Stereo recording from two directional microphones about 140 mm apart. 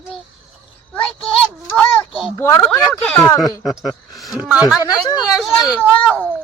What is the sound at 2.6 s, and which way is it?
Speech, 5° left (ahead or behind).